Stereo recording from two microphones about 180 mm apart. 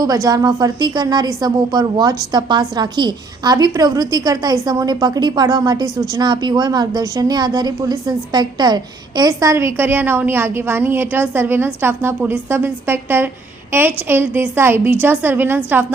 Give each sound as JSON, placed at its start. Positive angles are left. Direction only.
{"t": 0.0, "sound": "a woman's voice", "side_deg": -20}